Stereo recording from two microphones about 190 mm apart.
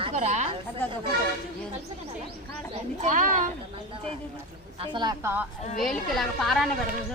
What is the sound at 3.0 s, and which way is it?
Speech, 45° right (ahead or behind).